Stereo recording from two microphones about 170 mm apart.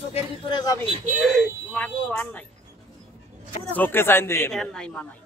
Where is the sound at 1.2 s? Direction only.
Centre (ahead or behind).